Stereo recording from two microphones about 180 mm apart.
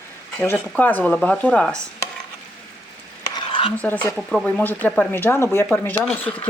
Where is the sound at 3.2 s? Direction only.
25° left (ahead or behind).